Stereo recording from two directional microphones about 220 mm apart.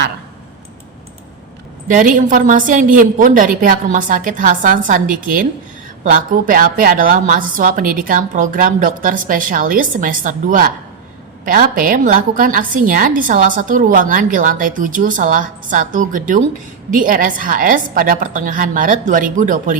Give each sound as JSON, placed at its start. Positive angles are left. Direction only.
{"t": 1.9, "sound": "a woman's voice", "side_deg": -35}